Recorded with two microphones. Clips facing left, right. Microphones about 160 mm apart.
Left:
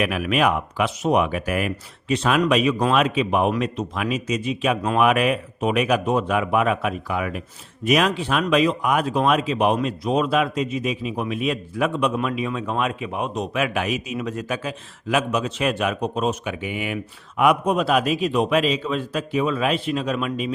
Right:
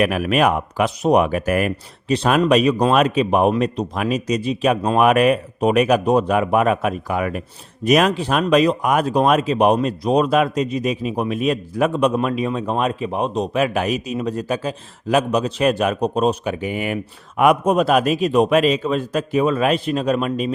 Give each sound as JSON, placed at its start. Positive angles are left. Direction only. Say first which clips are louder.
{"t": 0.0, "sound": "speech", "louder": "right 4 dB", "side_deg": -45}
{"t": 2.1, "sound": "speech", "louder": "right 4 dB", "side_deg": -35}